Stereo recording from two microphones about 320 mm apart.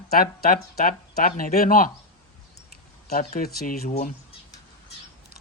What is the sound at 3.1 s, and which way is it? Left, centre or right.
Speech, left.